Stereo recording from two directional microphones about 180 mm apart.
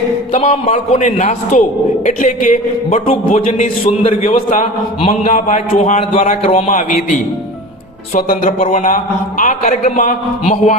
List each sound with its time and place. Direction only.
0.3 s a man's voice: 35° left (ahead or behind)